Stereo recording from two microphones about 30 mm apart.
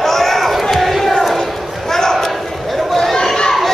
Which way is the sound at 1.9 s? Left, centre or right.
Centre.